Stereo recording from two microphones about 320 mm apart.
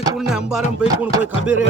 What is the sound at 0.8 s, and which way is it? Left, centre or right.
Chopping, centre.